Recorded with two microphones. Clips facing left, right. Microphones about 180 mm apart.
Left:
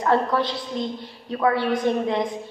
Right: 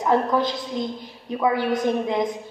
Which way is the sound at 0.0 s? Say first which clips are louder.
Right 1 dB; 15° right (ahead or behind).